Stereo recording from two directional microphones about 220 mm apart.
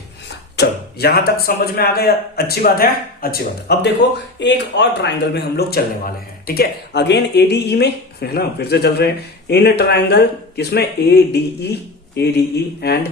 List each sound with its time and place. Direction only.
0.3 s speech: 50° left (ahead or behind)